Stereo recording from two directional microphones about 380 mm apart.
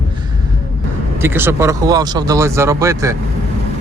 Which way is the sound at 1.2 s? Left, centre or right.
Centre.